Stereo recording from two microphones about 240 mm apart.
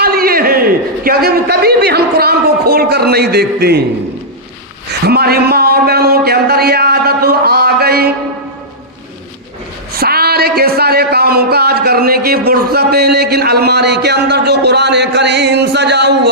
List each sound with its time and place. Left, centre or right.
0.0 s a man's voice: right
5.0 s speech: right
10.0 s speech: right